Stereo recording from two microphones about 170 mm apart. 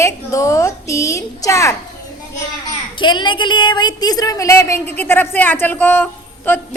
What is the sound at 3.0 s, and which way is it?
A woman's voice, 25° left (ahead or behind).